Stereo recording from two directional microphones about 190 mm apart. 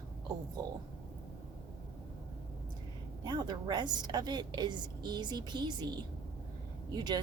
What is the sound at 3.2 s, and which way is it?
A woman's voice, 25° right (ahead or behind).